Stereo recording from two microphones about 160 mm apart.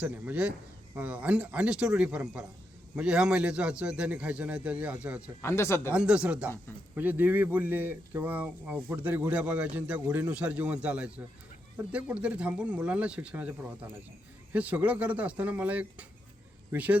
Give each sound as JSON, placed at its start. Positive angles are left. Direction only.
{"t": 0.0, "sound": "a man's voice", "side_deg": -10}
{"t": 5.4, "sound": "speech", "side_deg": 15}
{"t": 5.9, "sound": "a man's voice", "side_deg": -5}